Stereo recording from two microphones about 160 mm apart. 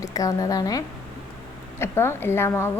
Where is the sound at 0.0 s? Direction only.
20° left (ahead or behind).